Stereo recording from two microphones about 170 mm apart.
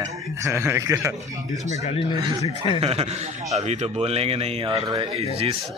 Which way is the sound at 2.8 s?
35° right (ahead or behind).